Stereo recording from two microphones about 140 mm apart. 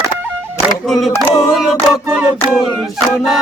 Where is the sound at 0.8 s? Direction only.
Centre (ahead or behind).